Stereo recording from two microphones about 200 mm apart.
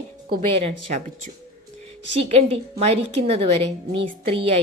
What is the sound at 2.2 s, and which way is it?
A woman's voice, 30° right (ahead or behind).